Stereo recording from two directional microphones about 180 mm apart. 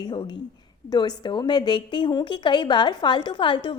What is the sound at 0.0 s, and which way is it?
A woman's voice, 25° left (ahead or behind).